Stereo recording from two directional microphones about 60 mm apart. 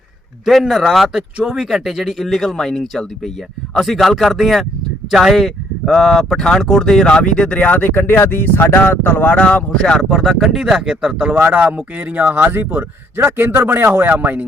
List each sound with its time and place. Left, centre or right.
0.7 s speech: centre
10.1 s speech: centre; by 14.1 s right
14.1 s speech: right